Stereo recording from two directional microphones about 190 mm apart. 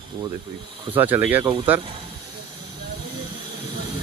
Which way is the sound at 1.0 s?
10° right (ahead or behind).